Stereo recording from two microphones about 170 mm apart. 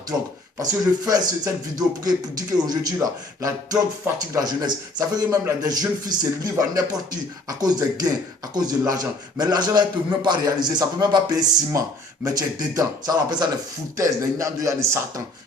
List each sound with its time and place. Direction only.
0.6 s a man's voice: 20° right (ahead or behind)